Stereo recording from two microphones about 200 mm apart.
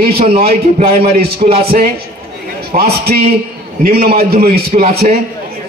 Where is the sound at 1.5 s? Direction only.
50° right (ahead or behind).